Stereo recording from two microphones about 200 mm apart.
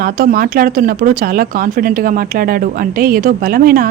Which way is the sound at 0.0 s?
45° right (ahead or behind).